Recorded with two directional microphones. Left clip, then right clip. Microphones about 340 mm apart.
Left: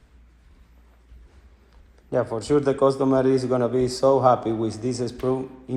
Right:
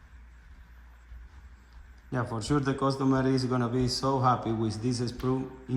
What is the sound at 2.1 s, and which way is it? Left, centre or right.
A man's voice, centre.